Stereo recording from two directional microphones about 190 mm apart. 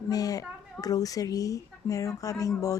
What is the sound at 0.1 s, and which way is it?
A woman's voice, 20° left (ahead or behind).